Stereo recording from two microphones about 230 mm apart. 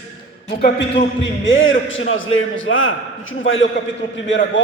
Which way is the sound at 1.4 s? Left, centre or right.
Left.